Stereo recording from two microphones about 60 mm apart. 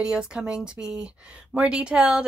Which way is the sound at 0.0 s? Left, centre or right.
Centre.